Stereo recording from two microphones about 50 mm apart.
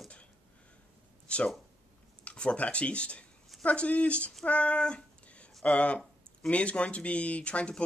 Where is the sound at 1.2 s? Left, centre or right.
Left.